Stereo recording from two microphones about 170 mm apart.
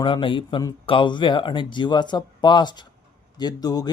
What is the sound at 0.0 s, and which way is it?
Speech, 30° left (ahead or behind).